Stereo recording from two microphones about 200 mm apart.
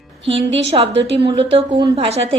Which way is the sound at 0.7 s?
25° right (ahead or behind).